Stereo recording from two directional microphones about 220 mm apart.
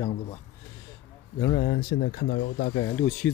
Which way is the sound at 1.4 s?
30° left (ahead or behind).